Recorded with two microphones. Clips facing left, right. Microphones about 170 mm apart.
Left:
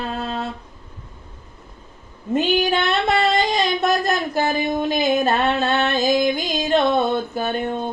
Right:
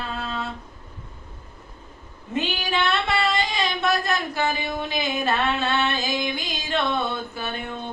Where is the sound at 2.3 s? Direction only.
40° left (ahead or behind).